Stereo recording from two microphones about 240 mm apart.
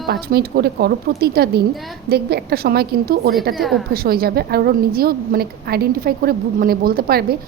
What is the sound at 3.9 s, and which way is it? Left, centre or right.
A woman's voice, right.